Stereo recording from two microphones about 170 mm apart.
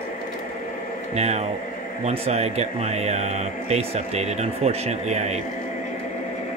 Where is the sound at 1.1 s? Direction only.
40° right (ahead or behind).